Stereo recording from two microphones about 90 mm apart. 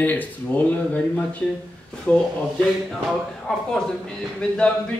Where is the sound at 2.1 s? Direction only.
15° left (ahead or behind).